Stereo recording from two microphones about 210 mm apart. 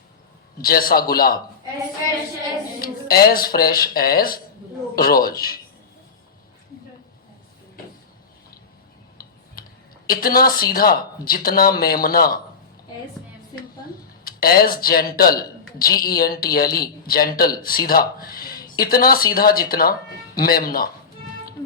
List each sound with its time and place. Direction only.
0.6 s a man's voice: 45° left (ahead or behind)
2.8 s a man's voice: 45° left (ahead or behind)
9.2 s tick-tock: 45° left (ahead or behind)
10.1 s a man's voice: 45° left (ahead or behind)
14.3 s a man's voice: 45° left (ahead or behind)